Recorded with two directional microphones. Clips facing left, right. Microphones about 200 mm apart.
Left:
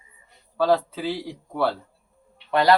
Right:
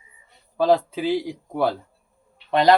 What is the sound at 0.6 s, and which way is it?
Speech, 15° right (ahead or behind).